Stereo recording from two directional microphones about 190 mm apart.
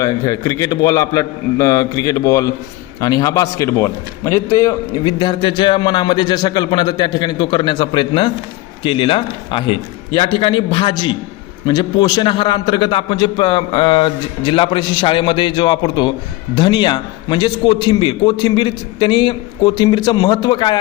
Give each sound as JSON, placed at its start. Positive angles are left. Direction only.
{"t": 0.0, "sound": "a man's voice", "side_deg": 15}